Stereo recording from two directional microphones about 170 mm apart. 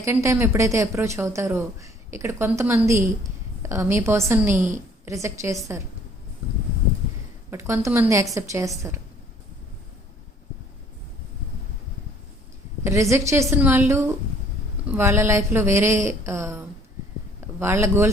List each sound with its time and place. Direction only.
0.0 s speech: 15° right (ahead or behind)
7.5 s speech: 15° right (ahead or behind)
12.8 s speech: 15° right (ahead or behind)